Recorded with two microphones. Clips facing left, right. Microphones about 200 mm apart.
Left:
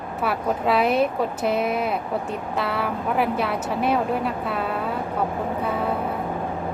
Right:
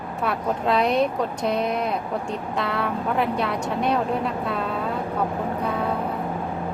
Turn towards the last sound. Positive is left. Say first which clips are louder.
# even
turn(degrees=5)  # may be behind; listen again after turning